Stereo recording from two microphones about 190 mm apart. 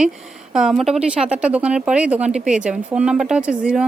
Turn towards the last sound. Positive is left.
turn(degrees=-5)  # may be behind; listen again after turning